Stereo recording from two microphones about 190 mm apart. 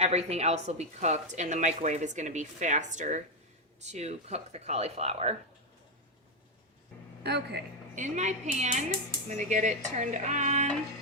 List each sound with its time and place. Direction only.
0.0 s speech: 35° right (ahead or behind)
7.3 s a man's voice: 60° right (ahead or behind)
7.9 s speech: 40° right (ahead or behind)